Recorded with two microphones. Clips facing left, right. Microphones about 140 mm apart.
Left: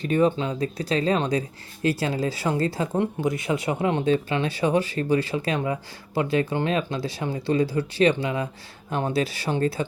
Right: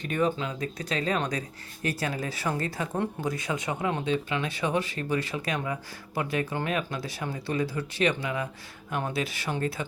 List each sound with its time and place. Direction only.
0.0 s speech: 30° left (ahead or behind)
4.0 s speech: 40° left (ahead or behind)
4.4 s speech: 30° left (ahead or behind)